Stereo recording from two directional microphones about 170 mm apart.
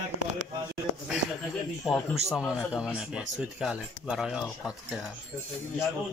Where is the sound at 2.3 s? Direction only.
5° right (ahead or behind).